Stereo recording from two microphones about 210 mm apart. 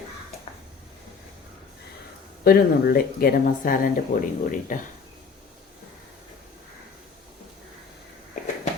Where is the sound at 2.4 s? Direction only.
45° left (ahead or behind).